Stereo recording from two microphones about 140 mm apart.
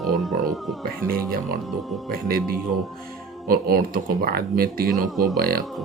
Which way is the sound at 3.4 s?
90° right.